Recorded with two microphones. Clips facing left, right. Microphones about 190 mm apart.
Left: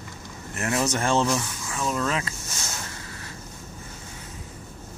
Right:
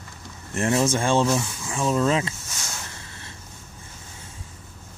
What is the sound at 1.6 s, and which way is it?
Speech, 25° right (ahead or behind).